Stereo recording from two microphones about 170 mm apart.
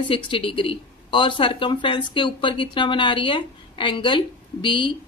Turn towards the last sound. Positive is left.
turn(degrees=30)  # may be behind; listen again after turning